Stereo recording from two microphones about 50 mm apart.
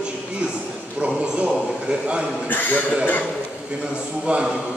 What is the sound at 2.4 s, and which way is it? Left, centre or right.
Speech, left.